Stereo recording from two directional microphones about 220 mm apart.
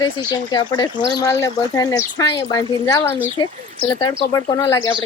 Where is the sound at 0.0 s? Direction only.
20° left (ahead or behind).